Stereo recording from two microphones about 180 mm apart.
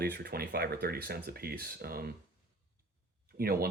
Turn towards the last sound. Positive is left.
turn(degrees=-55)  # may be behind; listen again after turning